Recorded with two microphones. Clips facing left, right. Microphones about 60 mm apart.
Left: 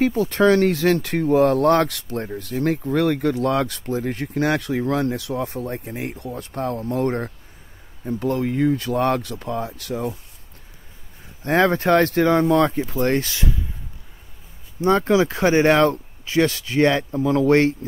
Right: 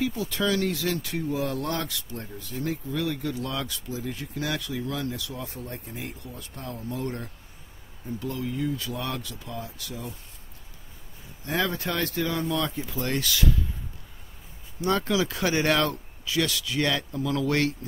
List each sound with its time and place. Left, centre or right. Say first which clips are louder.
0.0 s speech: left 10 dB; left
11.4 s speech: left 10 dB; left
14.8 s speech: left 8 dB; left